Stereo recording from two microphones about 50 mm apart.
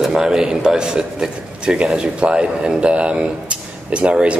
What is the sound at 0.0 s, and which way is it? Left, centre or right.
A man's voice, centre.